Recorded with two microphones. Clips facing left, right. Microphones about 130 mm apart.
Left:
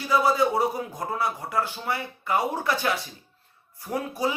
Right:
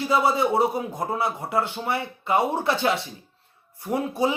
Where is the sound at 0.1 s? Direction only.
25° right (ahead or behind).